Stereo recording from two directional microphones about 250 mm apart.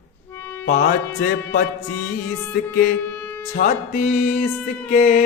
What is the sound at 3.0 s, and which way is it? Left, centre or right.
Music, centre.